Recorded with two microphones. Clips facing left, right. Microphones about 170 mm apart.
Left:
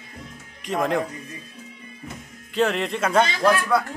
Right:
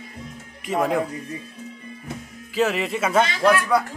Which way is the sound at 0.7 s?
5° right (ahead or behind).